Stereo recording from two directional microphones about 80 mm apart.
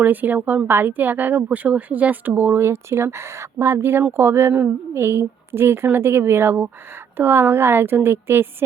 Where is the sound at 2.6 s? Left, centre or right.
Right.